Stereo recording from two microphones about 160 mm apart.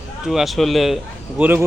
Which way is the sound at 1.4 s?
10° right (ahead or behind).